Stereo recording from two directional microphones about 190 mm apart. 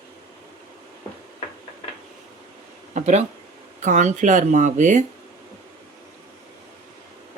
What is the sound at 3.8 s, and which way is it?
Speech, 40° right (ahead or behind).